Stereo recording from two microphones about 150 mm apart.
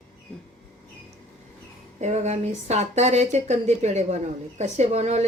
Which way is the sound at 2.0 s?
50° right (ahead or behind).